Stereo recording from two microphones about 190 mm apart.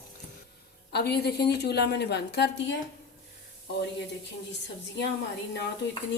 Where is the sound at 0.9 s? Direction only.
60° left (ahead or behind).